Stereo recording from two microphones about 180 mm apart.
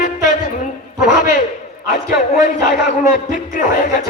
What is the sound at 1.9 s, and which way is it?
A man's voice, 50° left (ahead or behind).